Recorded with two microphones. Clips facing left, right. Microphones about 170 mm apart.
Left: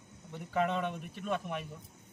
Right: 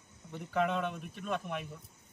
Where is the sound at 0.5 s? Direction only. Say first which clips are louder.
Even; centre (ahead or behind).